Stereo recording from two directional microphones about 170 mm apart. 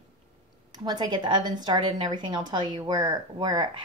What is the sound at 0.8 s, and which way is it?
A woman's voice, 25° right (ahead or behind).